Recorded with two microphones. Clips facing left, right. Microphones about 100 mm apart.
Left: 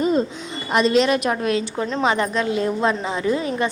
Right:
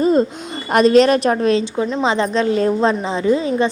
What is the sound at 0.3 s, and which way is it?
A woman's voice, 50° right (ahead or behind).